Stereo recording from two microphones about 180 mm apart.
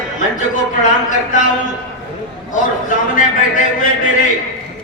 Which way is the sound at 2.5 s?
45° left (ahead or behind).